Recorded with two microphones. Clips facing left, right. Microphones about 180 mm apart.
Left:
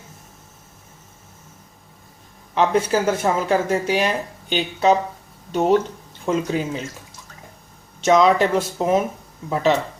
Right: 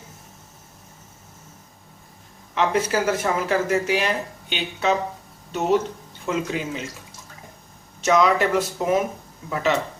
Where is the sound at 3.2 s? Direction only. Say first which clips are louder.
Left 3 dB; 35° left (ahead or behind).